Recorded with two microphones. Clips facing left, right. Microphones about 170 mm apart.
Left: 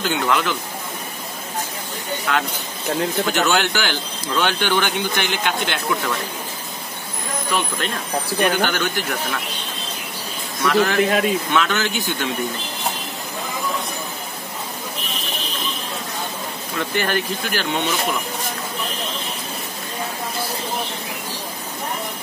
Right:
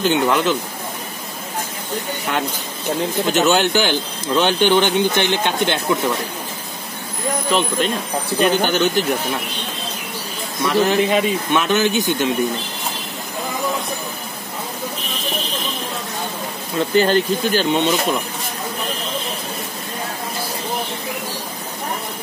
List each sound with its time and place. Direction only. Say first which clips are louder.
0.0 s speech: right 4 dB; 20° right (ahead or behind)
3.3 s speech: right 7 dB; 20° right (ahead or behind)
7.4 s speech: right 4 dB; 20° right (ahead or behind)
10.6 s speech: right 1 dB; 20° right (ahead or behind)
11.0 s speech: right 1 dB; centre (ahead or behind)
11.5 s speech: right 4 dB; 20° right (ahead or behind)
16.7 s speech: right 7 dB; 20° right (ahead or behind)